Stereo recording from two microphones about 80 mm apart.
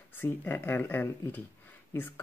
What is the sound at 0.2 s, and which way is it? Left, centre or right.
Speech, left.